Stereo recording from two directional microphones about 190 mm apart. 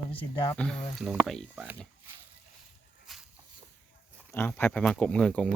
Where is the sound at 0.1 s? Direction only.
30° left (ahead or behind).